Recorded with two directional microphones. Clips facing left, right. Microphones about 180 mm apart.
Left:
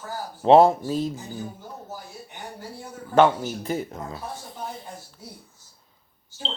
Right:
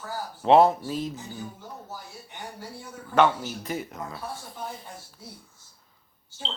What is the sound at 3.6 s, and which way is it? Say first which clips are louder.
Speech: left 3 dB; 30° left (ahead or behind).